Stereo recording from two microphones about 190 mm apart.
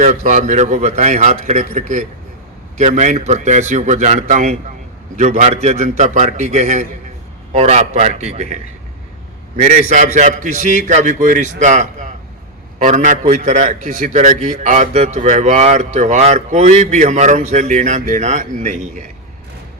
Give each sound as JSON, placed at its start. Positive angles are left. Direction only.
{"t": 0.0, "sound": "speech", "side_deg": -40}
{"t": 9.9, "sound": "speech", "side_deg": -40}